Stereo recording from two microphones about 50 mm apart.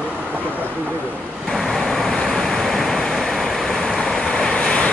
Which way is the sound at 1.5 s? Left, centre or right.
Centre.